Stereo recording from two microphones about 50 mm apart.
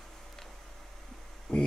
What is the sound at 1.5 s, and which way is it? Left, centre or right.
Speech, centre.